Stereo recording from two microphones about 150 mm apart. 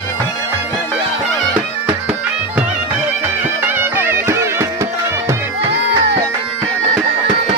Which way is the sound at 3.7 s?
15° right (ahead or behind).